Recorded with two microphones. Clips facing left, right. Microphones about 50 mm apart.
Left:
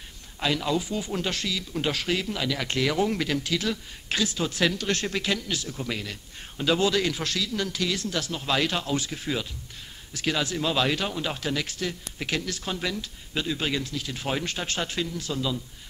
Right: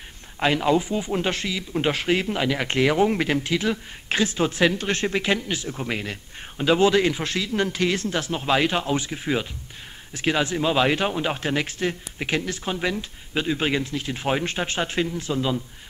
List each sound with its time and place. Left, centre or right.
0.4 s speech: right